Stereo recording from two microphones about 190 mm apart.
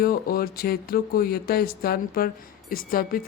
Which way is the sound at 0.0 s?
50° left (ahead or behind).